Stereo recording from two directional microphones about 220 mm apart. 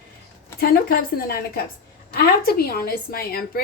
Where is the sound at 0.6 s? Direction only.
45° left (ahead or behind).